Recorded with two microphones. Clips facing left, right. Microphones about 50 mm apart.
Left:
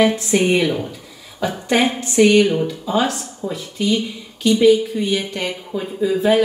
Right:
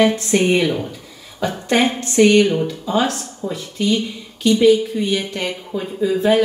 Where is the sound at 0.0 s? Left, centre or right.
Centre.